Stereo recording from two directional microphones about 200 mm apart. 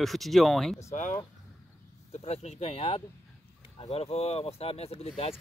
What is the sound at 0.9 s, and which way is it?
Speech, 40° left (ahead or behind).